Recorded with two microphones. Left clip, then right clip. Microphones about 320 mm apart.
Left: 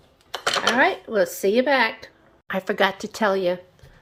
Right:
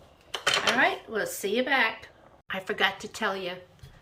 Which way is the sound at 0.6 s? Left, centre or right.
Centre.